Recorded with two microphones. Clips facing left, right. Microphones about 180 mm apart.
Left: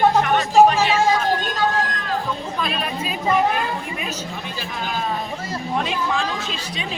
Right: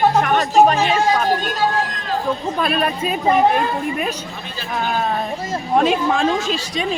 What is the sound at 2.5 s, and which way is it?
Speech, 50° right (ahead or behind).